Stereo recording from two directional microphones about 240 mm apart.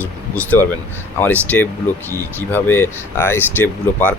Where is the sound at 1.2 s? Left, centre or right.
Centre.